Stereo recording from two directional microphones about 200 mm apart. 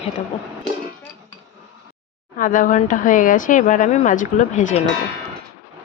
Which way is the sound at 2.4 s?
40° left (ahead or behind).